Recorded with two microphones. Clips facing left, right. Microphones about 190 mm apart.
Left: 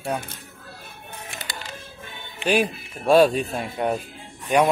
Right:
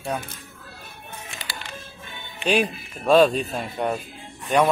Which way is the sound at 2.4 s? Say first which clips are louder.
Left 1 dB; 10° left (ahead or behind).